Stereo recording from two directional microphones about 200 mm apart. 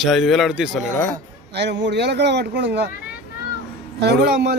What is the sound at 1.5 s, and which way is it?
Speech, 60° right (ahead or behind).